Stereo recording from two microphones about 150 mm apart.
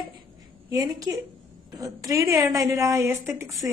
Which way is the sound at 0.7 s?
25° right (ahead or behind).